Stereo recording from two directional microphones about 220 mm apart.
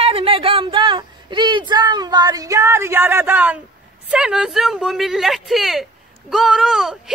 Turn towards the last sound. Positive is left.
turn(degrees=0)  # may be behind; listen again after turning